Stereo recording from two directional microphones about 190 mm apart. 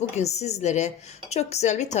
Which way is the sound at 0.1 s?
35° left (ahead or behind).